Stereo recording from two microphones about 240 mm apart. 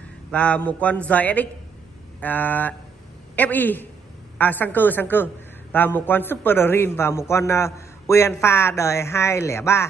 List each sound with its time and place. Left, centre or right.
0.3 s a man's voice: centre